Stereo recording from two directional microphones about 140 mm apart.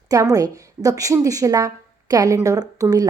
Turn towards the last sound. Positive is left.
turn(degrees=-25)  # may be behind; listen again after turning